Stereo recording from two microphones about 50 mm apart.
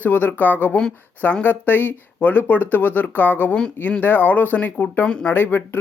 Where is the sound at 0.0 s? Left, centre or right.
Left.